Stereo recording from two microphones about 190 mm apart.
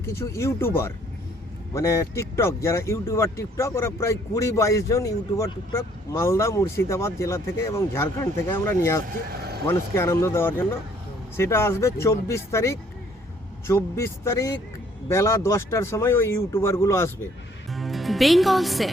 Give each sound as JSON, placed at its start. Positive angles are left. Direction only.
{"t": 0.0, "sound": "speech", "side_deg": 15}
{"t": 17.7, "sound": "speech", "side_deg": 0}